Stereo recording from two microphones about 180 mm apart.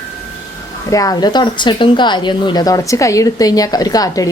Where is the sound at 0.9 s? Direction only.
20° left (ahead or behind).